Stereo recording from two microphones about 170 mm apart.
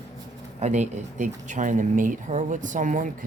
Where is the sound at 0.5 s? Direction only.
40° right (ahead or behind).